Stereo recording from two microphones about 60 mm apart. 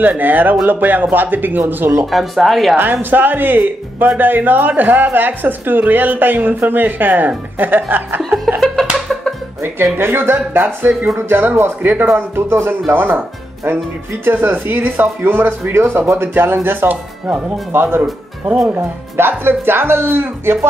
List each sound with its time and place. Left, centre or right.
0.0 s a woman's voice: right
2.0 s speech: centre
2.8 s a woman's voice: right
8.5 s music: centre
9.9 s a woman's voice: right
12.9 s a woman's voice: right
14.2 s a woman's voice: right